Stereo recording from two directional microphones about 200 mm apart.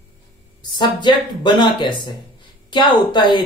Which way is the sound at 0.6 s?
25° left (ahead or behind).